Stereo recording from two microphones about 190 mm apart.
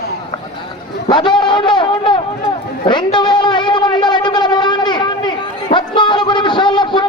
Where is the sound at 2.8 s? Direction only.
25° left (ahead or behind).